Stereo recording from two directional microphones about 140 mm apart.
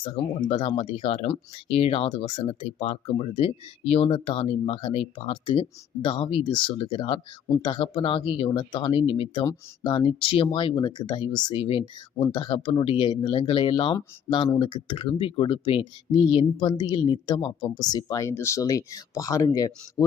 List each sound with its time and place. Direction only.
0.0 s speech: 40° left (ahead or behind)